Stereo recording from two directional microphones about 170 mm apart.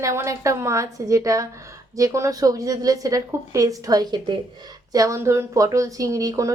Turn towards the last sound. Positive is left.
turn(degrees=-20)  # may be behind; listen again after turning